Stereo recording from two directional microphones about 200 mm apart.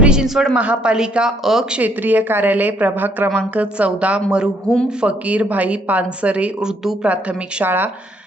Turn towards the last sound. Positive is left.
turn(degrees=-10)  # may be behind; listen again after turning